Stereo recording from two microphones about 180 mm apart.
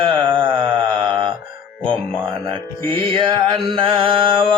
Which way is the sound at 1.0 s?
25° right (ahead or behind).